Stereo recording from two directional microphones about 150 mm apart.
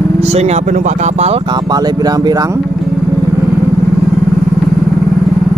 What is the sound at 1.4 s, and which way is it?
Speech, 30° right (ahead or behind).